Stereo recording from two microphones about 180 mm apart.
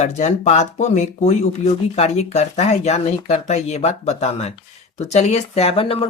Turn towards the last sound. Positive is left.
turn(degrees=30)  # may be behind; listen again after turning